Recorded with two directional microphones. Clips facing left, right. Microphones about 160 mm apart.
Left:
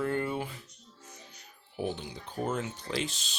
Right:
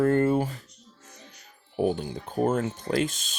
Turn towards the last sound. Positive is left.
turn(degrees=-50)  # may be behind; listen again after turning